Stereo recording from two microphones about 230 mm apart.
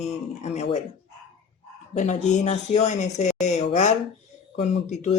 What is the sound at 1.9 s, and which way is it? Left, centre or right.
Speech, left.